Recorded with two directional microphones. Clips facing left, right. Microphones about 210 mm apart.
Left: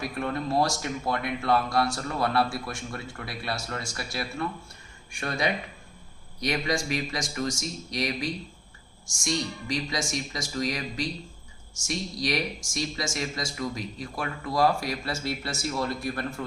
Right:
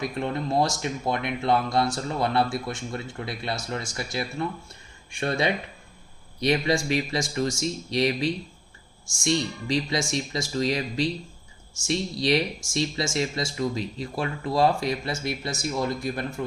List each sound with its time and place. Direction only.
0.0 s speech: 20° right (ahead or behind)